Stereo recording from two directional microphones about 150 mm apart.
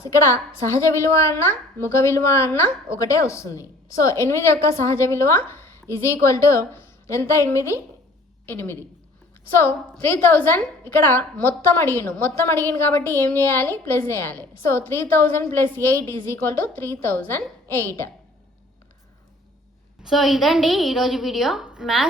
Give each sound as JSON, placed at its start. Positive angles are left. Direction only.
{"t": 0.1, "sound": "a woman's voice", "side_deg": 20}
{"t": 20.0, "sound": "a woman's voice", "side_deg": -5}